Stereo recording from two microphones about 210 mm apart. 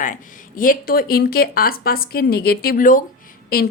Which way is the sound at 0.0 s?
40° left (ahead or behind).